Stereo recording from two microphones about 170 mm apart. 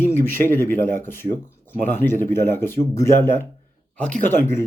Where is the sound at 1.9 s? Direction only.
15° left (ahead or behind).